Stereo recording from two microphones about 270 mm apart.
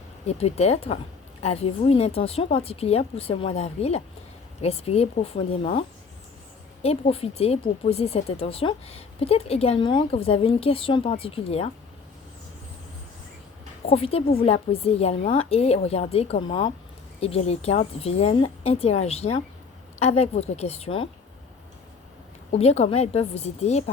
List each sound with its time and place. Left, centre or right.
0.3 s speech: left
6.8 s speech: left
13.9 s speech: left
22.5 s speech: left